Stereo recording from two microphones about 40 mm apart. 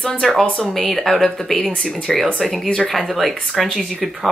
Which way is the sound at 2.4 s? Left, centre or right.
Centre.